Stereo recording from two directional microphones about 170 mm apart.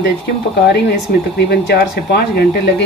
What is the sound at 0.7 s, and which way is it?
Speech, 85° left.